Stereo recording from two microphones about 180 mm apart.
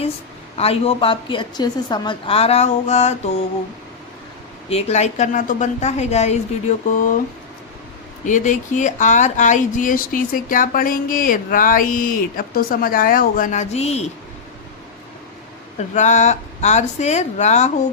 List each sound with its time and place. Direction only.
0.5 s a woman's voice: 35° left (ahead or behind)
4.7 s a woman's voice: 40° left (ahead or behind)
8.2 s speech: 45° left (ahead or behind)
15.8 s a woman's voice: 40° left (ahead or behind)